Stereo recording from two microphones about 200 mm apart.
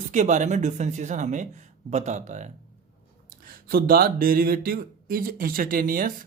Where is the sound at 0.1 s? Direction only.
40° right (ahead or behind).